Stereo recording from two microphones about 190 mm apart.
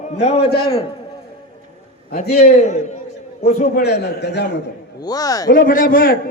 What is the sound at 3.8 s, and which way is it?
Speech, 60° left (ahead or behind).